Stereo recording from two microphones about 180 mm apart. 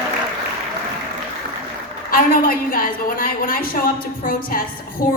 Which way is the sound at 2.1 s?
50° left (ahead or behind).